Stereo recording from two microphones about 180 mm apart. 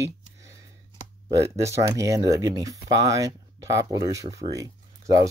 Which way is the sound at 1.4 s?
15° right (ahead or behind).